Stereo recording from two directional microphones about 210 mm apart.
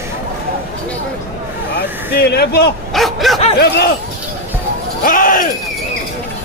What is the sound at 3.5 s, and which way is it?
Speech, 50° left (ahead or behind).